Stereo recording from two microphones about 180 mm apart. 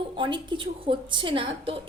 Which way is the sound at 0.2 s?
25° right (ahead or behind).